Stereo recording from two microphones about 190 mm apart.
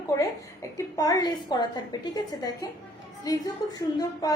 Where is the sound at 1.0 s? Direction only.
20° left (ahead or behind).